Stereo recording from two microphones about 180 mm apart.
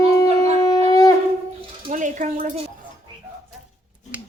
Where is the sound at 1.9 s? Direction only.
45° right (ahead or behind).